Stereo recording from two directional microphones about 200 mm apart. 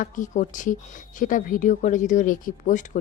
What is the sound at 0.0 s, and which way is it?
Speech, 40° left (ahead or behind).